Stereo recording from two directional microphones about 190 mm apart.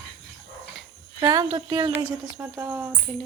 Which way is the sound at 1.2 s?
20° right (ahead or behind).